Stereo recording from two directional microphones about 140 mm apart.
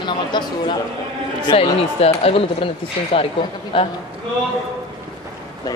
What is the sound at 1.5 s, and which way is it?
Speech, 45° left (ahead or behind).